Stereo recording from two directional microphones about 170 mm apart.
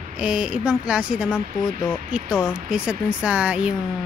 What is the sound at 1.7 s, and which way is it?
Speech, 50° right (ahead or behind).